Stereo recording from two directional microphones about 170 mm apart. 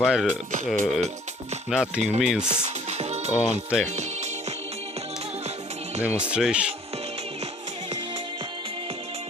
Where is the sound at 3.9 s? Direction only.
40° right (ahead or behind).